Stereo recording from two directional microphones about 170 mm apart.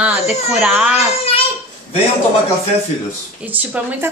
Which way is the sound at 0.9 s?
35° left (ahead or behind).